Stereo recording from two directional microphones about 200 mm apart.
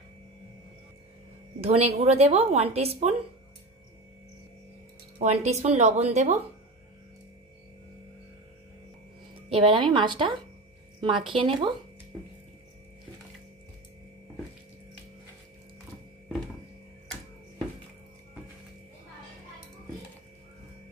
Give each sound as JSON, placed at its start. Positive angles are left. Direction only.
{"t": 1.6, "sound": "a woman's voice", "side_deg": -30}
{"t": 5.2, "sound": "a woman's voice", "side_deg": -35}
{"t": 9.5, "sound": "a woman's voice", "side_deg": -25}